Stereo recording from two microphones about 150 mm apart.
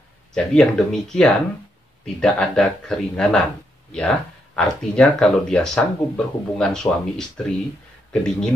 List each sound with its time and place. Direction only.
0.3 s speech: 5° left (ahead or behind)